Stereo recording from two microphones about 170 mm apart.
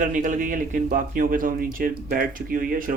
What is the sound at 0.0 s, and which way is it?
Speech, 50° right (ahead or behind).